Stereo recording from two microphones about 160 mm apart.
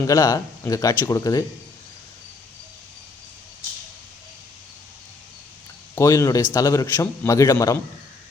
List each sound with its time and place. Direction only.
0.0 s a man's voice: 20° left (ahead or behind)
5.9 s a man's voice: 20° left (ahead or behind)